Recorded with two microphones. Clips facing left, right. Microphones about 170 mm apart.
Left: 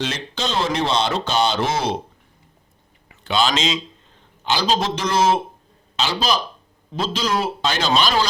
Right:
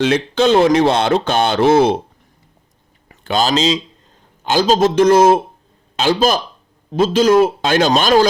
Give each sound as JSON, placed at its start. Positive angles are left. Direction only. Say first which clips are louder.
{"t": 0.0, "sound": "speech", "louder": "right 12 dB", "side_deg": -55}
{"t": 3.1, "sound": "speech", "louder": "right 4 dB", "side_deg": -40}
{"t": 4.4, "sound": "a man's voice", "louder": "right 7 dB", "side_deg": -45}